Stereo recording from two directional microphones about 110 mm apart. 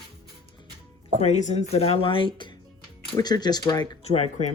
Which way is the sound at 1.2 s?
90° left.